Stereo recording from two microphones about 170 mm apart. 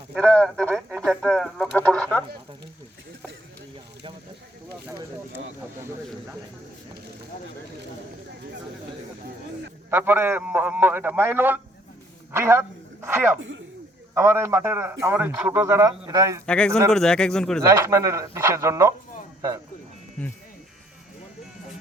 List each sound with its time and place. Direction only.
0.2 s speech: 5° left (ahead or behind)
9.9 s a man's voice: 15° right (ahead or behind)
16.5 s speech: 5° left (ahead or behind)
17.6 s a man's voice: 15° right (ahead or behind)